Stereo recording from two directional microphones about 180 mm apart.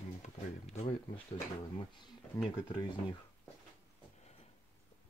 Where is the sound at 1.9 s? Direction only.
25° left (ahead or behind).